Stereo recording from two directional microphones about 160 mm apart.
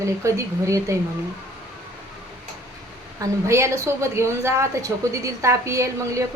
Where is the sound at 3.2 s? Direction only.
20° right (ahead or behind).